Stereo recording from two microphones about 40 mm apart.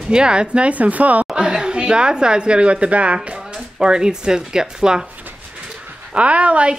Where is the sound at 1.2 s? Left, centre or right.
Centre.